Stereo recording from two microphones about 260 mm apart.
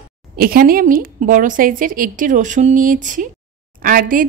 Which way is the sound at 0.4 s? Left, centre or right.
Right.